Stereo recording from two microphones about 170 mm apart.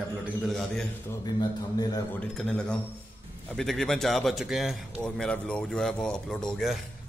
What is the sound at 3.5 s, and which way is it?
A man's voice, centre (ahead or behind).